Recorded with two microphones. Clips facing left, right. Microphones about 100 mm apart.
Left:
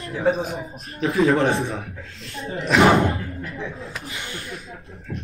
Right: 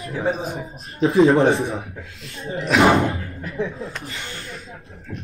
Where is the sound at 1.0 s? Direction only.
30° right (ahead or behind).